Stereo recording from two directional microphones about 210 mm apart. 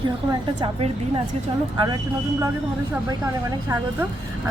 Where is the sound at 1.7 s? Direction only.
20° right (ahead or behind).